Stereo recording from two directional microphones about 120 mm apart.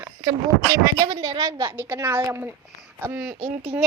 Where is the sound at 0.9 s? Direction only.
35° right (ahead or behind).